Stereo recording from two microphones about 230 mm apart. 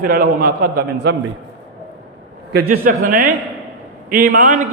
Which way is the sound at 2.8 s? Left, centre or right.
Right.